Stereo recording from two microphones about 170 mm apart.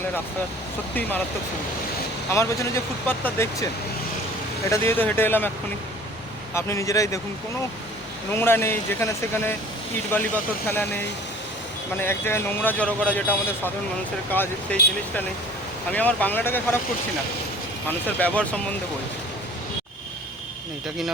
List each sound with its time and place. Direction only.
2.3 s speech: 15° left (ahead or behind)
4.7 s speech: 15° left (ahead or behind)
6.5 s speech: 15° left (ahead or behind)
8.3 s speech: 10° left (ahead or behind)
14.3 s speech: 10° left (ahead or behind)
17.8 s speech: 10° left (ahead or behind)